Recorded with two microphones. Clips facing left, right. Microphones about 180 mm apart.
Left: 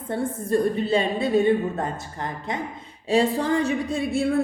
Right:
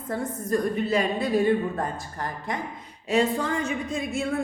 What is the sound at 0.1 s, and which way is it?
A woman's voice, 30° left (ahead or behind).